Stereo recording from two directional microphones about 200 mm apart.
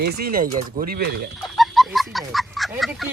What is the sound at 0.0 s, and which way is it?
Speech, 50° right (ahead or behind).